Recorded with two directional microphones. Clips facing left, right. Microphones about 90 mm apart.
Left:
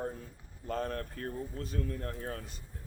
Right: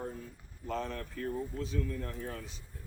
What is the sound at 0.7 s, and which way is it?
Speech, 45° left (ahead or behind).